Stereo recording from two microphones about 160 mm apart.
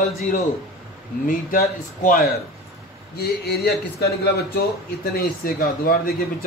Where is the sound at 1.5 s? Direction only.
65° left (ahead or behind).